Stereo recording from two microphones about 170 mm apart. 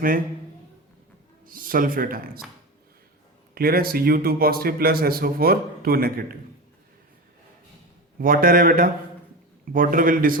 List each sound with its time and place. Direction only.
1.5 s speech: 55° right (ahead or behind)
3.5 s speech: 60° right (ahead or behind)
8.2 s speech: 55° right (ahead or behind)